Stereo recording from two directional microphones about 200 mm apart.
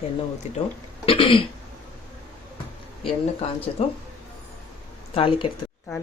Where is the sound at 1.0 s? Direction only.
25° left (ahead or behind).